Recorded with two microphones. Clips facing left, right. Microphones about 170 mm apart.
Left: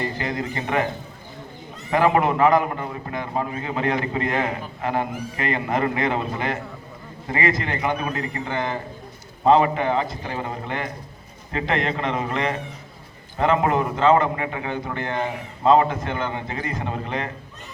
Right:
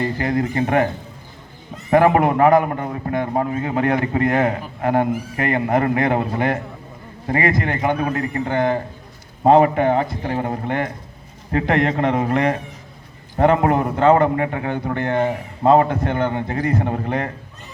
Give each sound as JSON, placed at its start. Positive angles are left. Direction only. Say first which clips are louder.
{"t": 0.0, "sound": "a man's voice", "louder": "right 6 dB", "side_deg": -50}
{"t": 1.9, "sound": "a man's voice", "louder": "right 4 dB", "side_deg": -50}